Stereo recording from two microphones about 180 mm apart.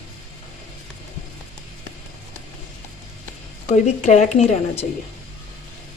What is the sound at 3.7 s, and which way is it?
A woman's voice, 40° left (ahead or behind).